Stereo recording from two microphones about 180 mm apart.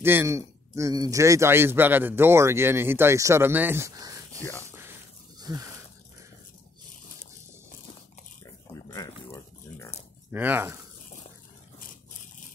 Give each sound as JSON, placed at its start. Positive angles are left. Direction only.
{"t": 0.0, "sound": "a man's voice", "side_deg": -15}
{"t": 4.4, "sound": "speech", "side_deg": 10}
{"t": 4.6, "sound": "a sound", "side_deg": -15}
{"t": 5.4, "sound": "speech", "side_deg": -20}
{"t": 8.7, "sound": "a sound", "side_deg": 20}
{"t": 10.3, "sound": "a man's voice", "side_deg": -10}